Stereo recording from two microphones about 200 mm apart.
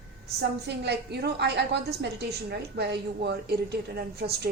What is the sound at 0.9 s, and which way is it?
A woman's voice, 55° right (ahead or behind).